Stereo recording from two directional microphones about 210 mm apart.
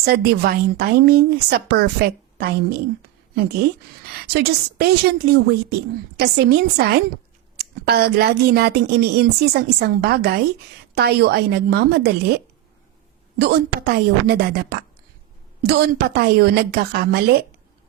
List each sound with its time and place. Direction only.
0.0 s a woman's voice: 50° right (ahead or behind)
4.1 s a woman's voice: 50° right (ahead or behind)
13.4 s a woman's voice: 50° right (ahead or behind)